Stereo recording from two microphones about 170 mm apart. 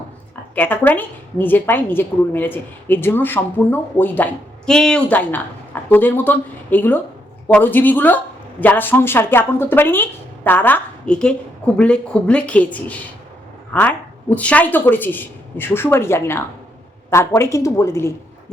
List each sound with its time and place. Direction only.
0.5 s a woman's voice: 10° left (ahead or behind)